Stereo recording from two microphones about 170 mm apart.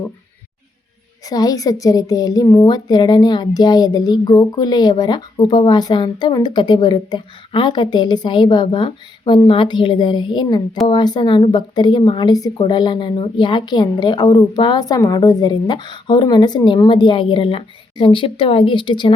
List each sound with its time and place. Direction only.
1.3 s a woman's voice: 20° left (ahead or behind)